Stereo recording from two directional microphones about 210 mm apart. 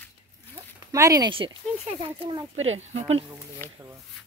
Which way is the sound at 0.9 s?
15° right (ahead or behind).